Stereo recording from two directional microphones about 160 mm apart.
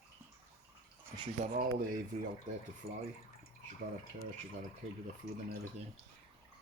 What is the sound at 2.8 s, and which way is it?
Speech, 40° right (ahead or behind).